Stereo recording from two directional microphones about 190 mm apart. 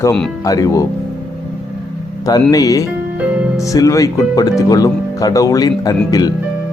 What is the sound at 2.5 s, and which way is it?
Speech, 20° left (ahead or behind).